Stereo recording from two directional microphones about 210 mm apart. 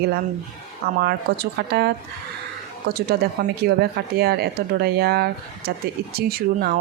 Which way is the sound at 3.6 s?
50° right (ahead or behind).